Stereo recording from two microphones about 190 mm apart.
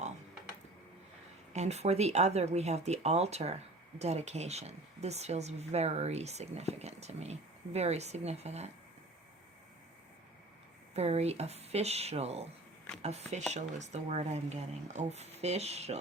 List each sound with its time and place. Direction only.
1.5 s speech: 35° right (ahead or behind)
10.9 s speech: 35° right (ahead or behind)